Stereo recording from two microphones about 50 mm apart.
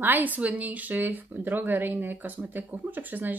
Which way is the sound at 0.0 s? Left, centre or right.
Right.